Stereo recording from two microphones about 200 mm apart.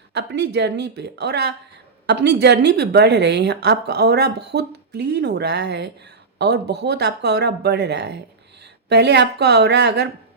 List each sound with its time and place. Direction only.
0.1 s a woman's voice: 55° right (ahead or behind)